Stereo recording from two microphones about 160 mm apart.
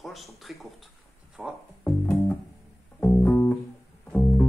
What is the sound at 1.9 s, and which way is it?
Music, 15° left (ahead or behind).